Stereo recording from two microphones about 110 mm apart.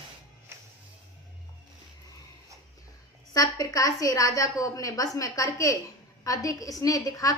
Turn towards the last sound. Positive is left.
turn(degrees=30)  # may be behind; listen again after turning